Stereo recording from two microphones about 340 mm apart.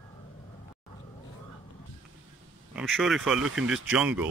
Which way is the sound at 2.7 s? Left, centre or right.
Centre.